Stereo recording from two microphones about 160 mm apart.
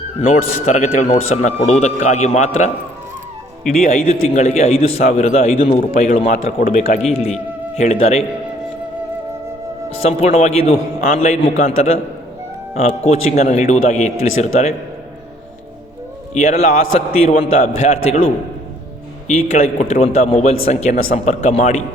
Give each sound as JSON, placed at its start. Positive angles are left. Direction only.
{"t": 0.2, "sound": "a man's voice", "side_deg": 50}
{"t": 3.8, "sound": "a man's voice", "side_deg": 60}
{"t": 4.4, "sound": "a man's voice", "side_deg": 45}
{"t": 6.8, "sound": "a man's voice", "side_deg": 45}
{"t": 10.1, "sound": "a man's voice", "side_deg": 45}
{"t": 16.3, "sound": "a man's voice", "side_deg": 45}
{"t": 19.3, "sound": "a man's voice", "side_deg": 45}